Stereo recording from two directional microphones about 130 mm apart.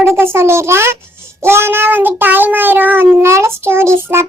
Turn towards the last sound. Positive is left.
turn(degrees=-20)  # may be behind; listen again after turning